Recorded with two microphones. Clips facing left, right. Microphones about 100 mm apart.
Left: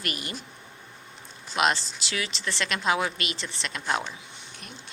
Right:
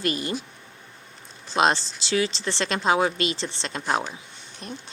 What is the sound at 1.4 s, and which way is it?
A woman's voice, 30° right (ahead or behind).